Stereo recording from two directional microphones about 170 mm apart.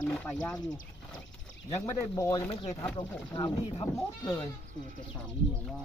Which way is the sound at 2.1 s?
20° left (ahead or behind).